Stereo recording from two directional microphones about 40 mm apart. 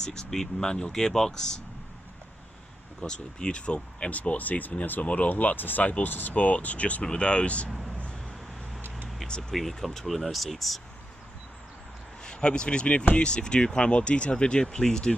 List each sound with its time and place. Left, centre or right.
0.0 s speech: centre
3.0 s speech: left
5.0 s speech: left
5.3 s speech: left
6.3 s speech: left
7.0 s speech: left
9.4 s speech: centre
12.2 s speech: left